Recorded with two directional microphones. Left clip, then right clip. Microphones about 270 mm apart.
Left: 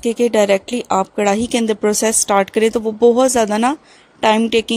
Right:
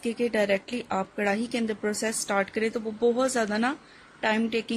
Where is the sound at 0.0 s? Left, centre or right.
Left.